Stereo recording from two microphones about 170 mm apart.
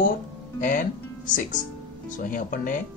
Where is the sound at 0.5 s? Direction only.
50° left (ahead or behind).